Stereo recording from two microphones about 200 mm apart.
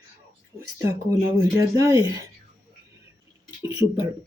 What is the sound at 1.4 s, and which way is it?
Speech, 15° right (ahead or behind).